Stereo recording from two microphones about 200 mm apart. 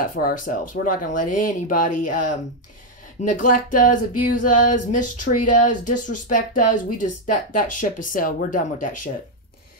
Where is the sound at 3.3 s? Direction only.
40° left (ahead or behind).